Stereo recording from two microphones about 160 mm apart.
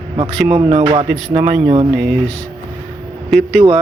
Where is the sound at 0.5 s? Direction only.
35° right (ahead or behind).